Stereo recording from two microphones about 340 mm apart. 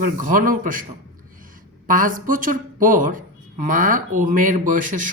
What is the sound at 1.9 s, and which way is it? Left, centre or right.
Speech, right.